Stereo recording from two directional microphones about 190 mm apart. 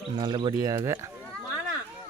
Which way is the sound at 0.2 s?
25° right (ahead or behind).